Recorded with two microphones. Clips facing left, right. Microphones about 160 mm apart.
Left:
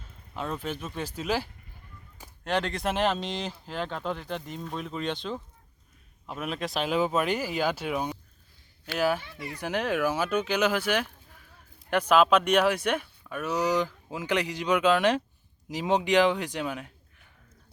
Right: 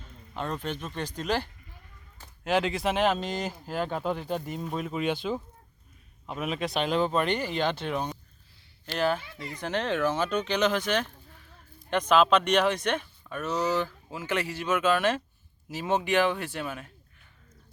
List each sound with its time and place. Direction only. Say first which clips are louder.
0.3 s speech: even; 5° left (ahead or behind)